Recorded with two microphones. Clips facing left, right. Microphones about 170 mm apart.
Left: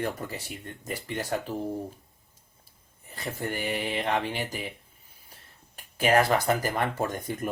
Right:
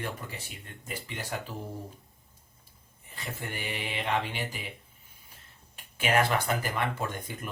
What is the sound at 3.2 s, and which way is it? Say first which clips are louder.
Speech: left 6 dB; 40° left (ahead or behind).